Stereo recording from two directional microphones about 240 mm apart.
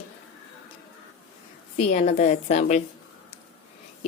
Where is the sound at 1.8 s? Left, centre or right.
Left.